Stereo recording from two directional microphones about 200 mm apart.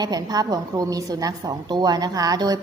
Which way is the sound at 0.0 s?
20° right (ahead or behind).